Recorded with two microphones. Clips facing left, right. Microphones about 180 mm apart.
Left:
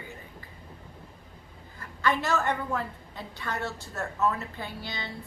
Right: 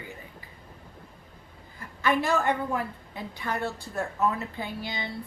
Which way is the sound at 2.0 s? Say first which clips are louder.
Right 2 dB; 15° right (ahead or behind).